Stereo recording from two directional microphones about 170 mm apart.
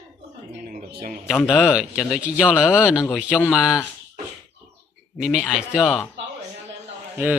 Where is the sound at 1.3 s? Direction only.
Centre (ahead or behind).